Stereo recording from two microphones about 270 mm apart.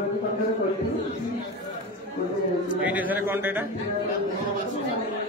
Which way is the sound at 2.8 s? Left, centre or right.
Centre.